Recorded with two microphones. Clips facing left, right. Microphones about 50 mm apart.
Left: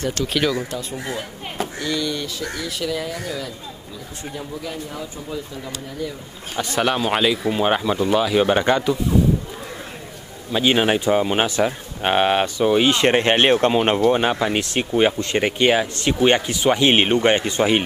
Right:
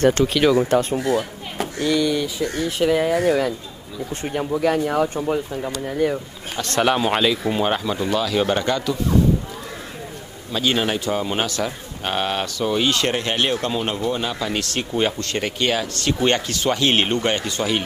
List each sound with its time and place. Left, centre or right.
0.2 s speech: right
0.7 s speech: right
1.8 s speech: right
2.5 s speech: right
6.8 s speech: centre
7.6 s speech: centre
10.5 s speech: left